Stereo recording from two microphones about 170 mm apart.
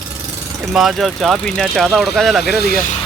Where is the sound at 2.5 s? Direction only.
70° left (ahead or behind).